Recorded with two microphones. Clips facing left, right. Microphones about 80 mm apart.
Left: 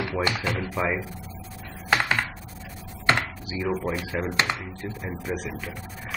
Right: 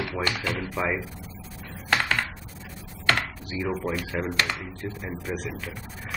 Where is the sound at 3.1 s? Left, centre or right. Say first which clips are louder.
Left 2 dB; left.